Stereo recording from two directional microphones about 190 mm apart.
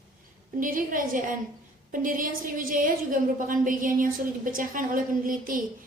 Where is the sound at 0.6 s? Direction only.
45° right (ahead or behind).